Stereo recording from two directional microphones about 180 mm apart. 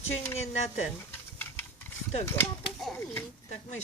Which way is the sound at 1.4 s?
10° left (ahead or behind).